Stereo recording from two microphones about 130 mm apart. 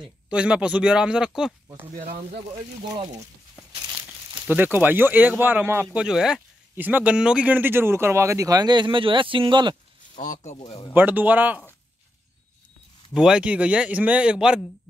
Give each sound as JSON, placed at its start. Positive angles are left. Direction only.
{"t": 0.3, "sound": "a man's voice", "side_deg": -10}
{"t": 3.7, "sound": "crumpling", "side_deg": -35}
{"t": 4.5, "sound": "a man's voice", "side_deg": -15}
{"t": 5.9, "sound": "speech", "side_deg": -5}
{"t": 10.2, "sound": "speech", "side_deg": 70}
{"t": 10.9, "sound": "a man's voice", "side_deg": -15}
{"t": 13.1, "sound": "a man's voice", "side_deg": -5}